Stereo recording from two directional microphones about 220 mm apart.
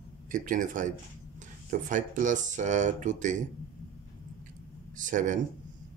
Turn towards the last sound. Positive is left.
turn(degrees=-35)  # may be behind; listen again after turning